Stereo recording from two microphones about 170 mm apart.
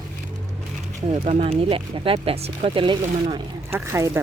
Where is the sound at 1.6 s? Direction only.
30° right (ahead or behind).